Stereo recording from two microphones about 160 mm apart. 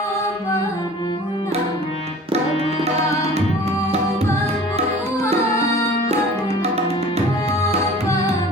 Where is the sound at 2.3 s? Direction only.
40° right (ahead or behind).